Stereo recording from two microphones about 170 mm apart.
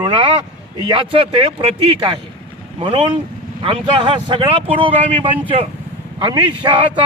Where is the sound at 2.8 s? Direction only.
30° right (ahead or behind).